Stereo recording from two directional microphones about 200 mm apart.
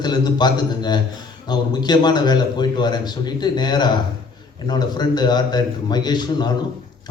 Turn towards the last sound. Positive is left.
turn(degrees=20)  # may be behind; listen again after turning